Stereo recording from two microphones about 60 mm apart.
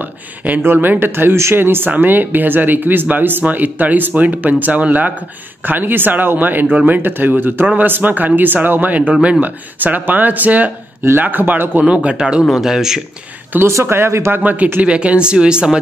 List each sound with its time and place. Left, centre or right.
0.7 s speech: right
11.8 s speech: right
13.7 s speech: right
14.3 s speech: right